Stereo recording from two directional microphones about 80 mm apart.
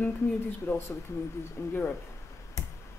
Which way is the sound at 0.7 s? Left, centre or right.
Left.